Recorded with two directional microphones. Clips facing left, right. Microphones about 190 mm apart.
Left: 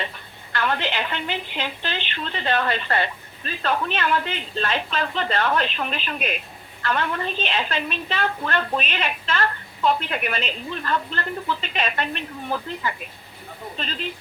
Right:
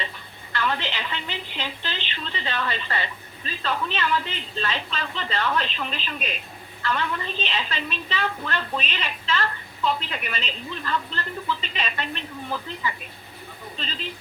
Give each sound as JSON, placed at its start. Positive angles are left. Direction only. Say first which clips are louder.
{"t": 0.5, "sound": "a woman's voice", "louder": "left 3 dB", "side_deg": 55}